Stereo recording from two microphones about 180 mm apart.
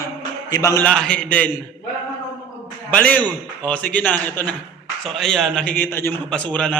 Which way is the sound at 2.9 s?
10° left (ahead or behind).